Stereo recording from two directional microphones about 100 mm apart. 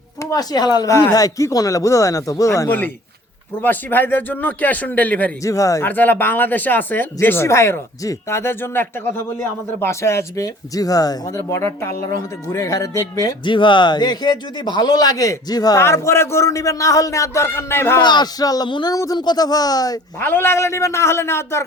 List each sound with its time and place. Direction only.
0.2 s speech: 35° left (ahead or behind)
2.6 s speech: 20° left (ahead or behind)
5.4 s speech: 35° left (ahead or behind)
5.8 s speech: 20° left (ahead or behind)
13.4 s a man's voice: 55° left (ahead or behind)
15.8 s speech: 25° left (ahead or behind)
18.0 s a man's voice: 45° left (ahead or behind)
20.1 s speech: 20° left (ahead or behind)